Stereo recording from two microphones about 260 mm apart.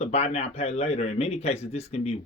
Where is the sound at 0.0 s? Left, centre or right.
Left.